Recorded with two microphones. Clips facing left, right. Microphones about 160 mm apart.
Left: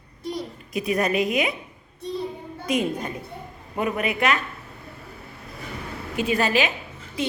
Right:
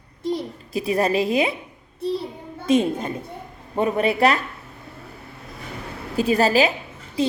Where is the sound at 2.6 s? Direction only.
25° right (ahead or behind).